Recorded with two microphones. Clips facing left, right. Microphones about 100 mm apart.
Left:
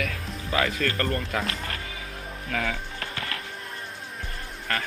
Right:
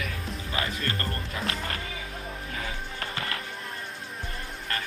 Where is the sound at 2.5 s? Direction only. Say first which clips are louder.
Left 9 dB; 80° left.